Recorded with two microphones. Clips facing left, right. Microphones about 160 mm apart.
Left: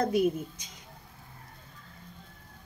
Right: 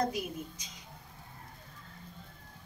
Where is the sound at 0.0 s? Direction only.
55° left (ahead or behind).